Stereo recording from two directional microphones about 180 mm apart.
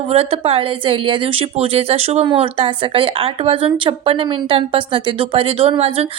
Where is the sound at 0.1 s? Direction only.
30° right (ahead or behind).